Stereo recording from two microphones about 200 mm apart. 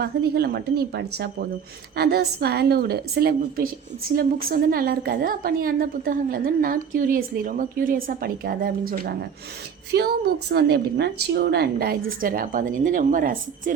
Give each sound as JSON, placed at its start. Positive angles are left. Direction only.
{"t": 0.0, "sound": "a woman's voice", "side_deg": -50}